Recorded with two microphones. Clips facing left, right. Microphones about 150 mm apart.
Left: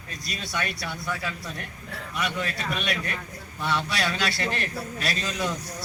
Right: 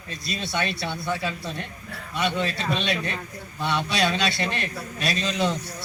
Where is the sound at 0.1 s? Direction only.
25° right (ahead or behind).